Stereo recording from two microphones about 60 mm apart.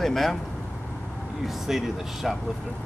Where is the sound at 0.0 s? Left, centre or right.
Centre.